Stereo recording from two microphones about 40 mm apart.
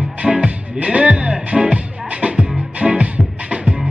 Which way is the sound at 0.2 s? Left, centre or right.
Centre.